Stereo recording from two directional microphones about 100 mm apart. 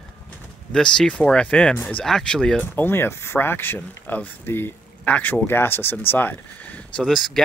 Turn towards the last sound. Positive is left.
turn(degrees=15)  # may be behind; listen again after turning